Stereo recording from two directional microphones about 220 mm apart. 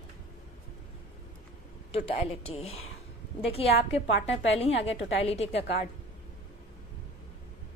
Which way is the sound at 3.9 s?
30° left (ahead or behind).